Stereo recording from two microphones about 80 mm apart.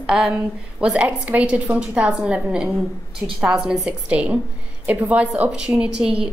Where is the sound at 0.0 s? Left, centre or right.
Centre.